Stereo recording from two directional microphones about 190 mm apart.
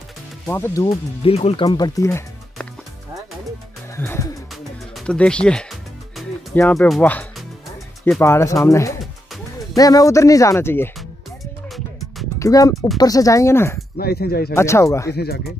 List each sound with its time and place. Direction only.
0.5 s speech: 10° left (ahead or behind)
1.2 s speech: 30° left (ahead or behind)
2.0 s music: 15° left (ahead or behind)
3.9 s music: 15° left (ahead or behind)
6.7 s speech: 5° left (ahead or behind)
12.4 s speech: 15° left (ahead or behind)
13.9 s speech: 55° left (ahead or behind)
14.5 s speech: 15° left (ahead or behind)
15.1 s speech: 55° left (ahead or behind)